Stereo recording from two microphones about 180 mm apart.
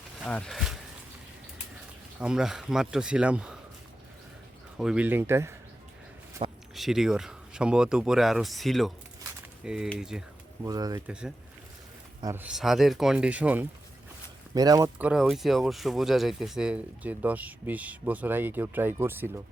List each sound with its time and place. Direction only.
0.3 s speech: 5° left (ahead or behind)
2.2 s speech: 5° right (ahead or behind)
4.8 s speech: 5° right (ahead or behind)
6.4 s a sound: 35° right (ahead or behind)
6.7 s speech: centre (ahead or behind)
10.7 s speech: 20° right (ahead or behind)
11.0 s speech: 5° right (ahead or behind)
14.5 s speech: 20° right (ahead or behind)
14.9 s speech: 5° right (ahead or behind)